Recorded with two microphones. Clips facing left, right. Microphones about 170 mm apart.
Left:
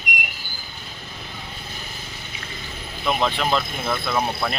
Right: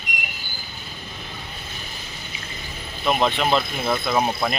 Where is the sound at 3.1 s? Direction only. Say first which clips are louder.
Right 2 dB; 5° right (ahead or behind).